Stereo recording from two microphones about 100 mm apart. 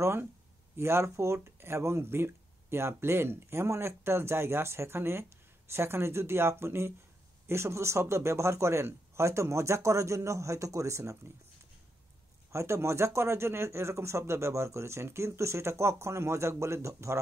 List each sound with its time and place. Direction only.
0.0 s speech: 25° right (ahead or behind)
12.5 s speech: 30° right (ahead or behind)